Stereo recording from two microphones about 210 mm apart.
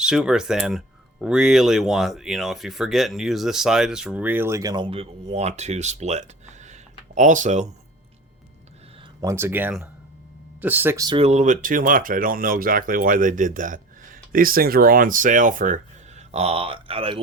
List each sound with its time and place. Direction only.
0.0 s speech: 5° right (ahead or behind); by 7.7 s 35° right (ahead or behind)
9.2 s speech: 10° right (ahead or behind)